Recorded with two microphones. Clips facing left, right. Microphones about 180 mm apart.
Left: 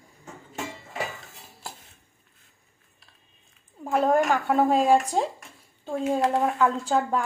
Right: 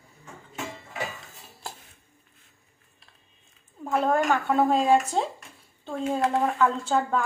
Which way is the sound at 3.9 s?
10° left (ahead or behind).